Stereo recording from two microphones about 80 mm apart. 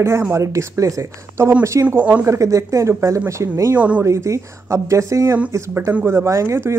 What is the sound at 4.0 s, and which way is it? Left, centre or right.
Speech, right.